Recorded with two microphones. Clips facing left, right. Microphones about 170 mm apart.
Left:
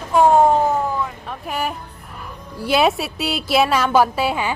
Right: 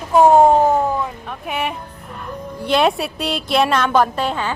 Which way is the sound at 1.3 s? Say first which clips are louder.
Right 1 dB; centre (ahead or behind).